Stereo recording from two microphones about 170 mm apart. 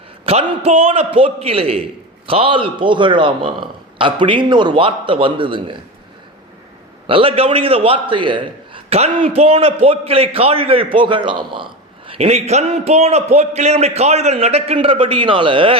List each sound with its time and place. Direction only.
0.3 s a man's voice: 35° right (ahead or behind)
7.1 s a man's voice: 35° right (ahead or behind)